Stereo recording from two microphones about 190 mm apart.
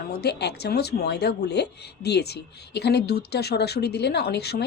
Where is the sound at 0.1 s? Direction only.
60° left (ahead or behind).